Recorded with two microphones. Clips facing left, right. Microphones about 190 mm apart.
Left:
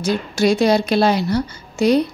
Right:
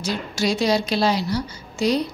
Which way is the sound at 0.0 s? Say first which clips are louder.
Left 6 dB; 55° left (ahead or behind).